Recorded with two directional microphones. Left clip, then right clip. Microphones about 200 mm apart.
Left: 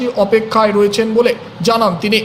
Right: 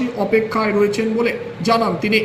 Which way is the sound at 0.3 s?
45° left (ahead or behind).